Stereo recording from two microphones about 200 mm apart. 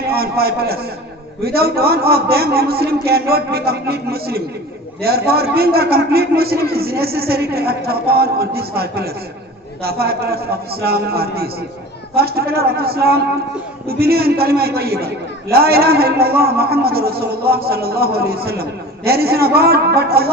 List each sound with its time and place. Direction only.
0.1 s a man's voice: 50° right (ahead or behind)